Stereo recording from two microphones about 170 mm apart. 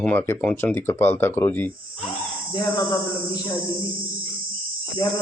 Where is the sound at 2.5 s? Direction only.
20° left (ahead or behind).